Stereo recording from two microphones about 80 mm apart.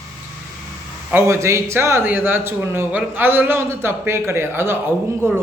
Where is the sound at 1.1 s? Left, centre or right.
Right.